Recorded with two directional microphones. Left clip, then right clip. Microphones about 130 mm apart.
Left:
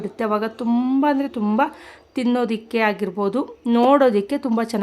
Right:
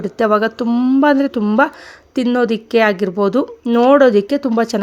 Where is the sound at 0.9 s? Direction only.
35° right (ahead or behind).